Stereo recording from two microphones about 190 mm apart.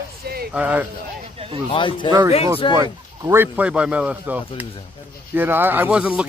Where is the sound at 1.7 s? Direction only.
25° left (ahead or behind).